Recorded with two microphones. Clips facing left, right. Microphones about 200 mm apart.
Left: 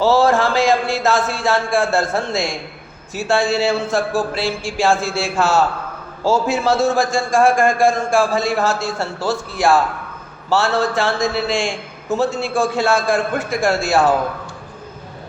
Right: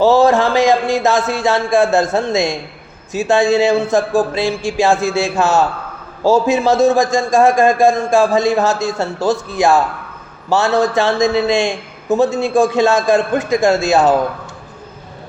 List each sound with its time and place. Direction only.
0.0 s a man's voice: 20° right (ahead or behind)